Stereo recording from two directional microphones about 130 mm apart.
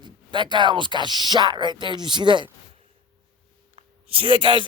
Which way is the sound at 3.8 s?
50° right (ahead or behind).